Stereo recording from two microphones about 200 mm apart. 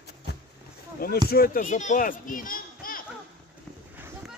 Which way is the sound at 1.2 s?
50° left (ahead or behind).